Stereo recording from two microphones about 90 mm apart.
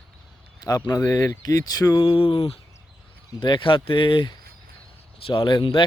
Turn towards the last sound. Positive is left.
turn(degrees=70)  # may be behind; listen again after turning